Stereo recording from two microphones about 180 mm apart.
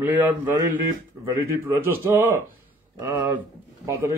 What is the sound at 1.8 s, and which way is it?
A man's voice, 10° right (ahead or behind).